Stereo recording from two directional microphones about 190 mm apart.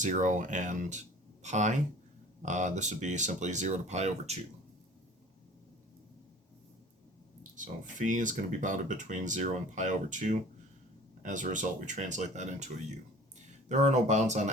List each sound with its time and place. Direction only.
0.0 s speech: 40° right (ahead or behind)
7.5 s speech: 40° right (ahead or behind)